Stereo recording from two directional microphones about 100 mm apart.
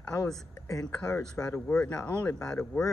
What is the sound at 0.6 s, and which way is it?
Speech, 35° left (ahead or behind).